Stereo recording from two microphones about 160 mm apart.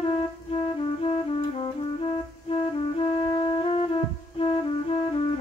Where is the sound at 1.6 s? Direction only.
35° left (ahead or behind).